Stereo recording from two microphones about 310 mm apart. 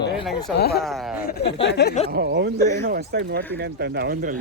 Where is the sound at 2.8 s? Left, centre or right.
Right.